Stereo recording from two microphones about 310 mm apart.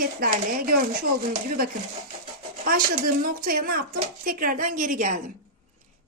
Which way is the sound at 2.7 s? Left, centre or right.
Right.